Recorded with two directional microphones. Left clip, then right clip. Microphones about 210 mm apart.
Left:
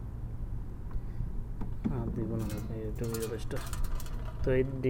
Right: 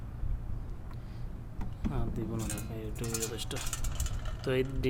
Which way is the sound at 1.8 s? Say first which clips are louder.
Left 2 dB; 5° right (ahead or behind).